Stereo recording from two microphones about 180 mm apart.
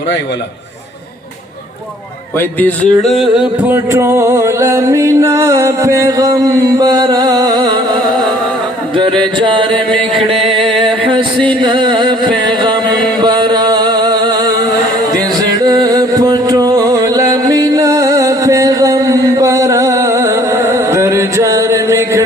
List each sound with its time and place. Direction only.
2.4 s music: 10° left (ahead or behind); by 7.8 s 25° right (ahead or behind)
10.2 s music: 30° right (ahead or behind)
13.2 s music: 25° right (ahead or behind)